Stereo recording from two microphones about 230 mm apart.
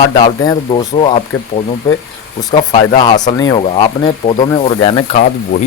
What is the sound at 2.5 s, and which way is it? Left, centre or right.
Speech, left.